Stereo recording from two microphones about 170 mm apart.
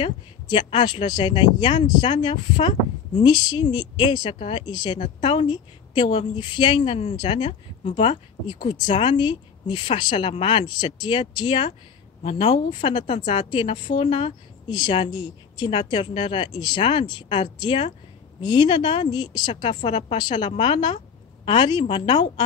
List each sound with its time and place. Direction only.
0.0 s a woman's voice: 30° left (ahead or behind)
3.2 s a woman's voice: 25° left (ahead or behind)